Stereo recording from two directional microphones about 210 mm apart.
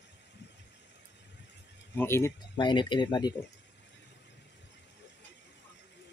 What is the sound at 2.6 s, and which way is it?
Speech, 20° left (ahead or behind).